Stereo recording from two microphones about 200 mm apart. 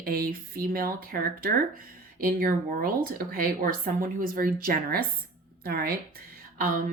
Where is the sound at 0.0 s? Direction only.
50° right (ahead or behind).